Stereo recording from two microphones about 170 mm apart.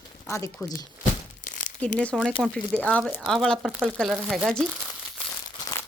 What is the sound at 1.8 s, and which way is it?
Speech, 5° left (ahead or behind).